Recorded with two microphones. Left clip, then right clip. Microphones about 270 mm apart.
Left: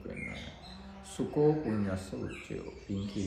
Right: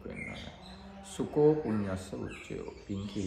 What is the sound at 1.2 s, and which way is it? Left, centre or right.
Speech, centre.